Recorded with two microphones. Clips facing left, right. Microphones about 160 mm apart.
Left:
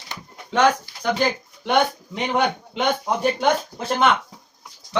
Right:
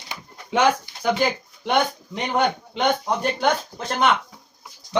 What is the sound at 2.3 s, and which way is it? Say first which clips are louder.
Speech: even; 5° left (ahead or behind).